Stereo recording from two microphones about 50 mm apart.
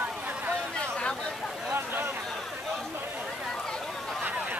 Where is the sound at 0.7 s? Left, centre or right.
Centre.